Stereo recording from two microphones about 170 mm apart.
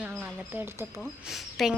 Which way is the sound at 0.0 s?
10° right (ahead or behind).